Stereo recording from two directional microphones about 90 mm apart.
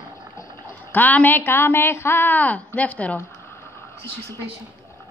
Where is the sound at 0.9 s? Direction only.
20° left (ahead or behind).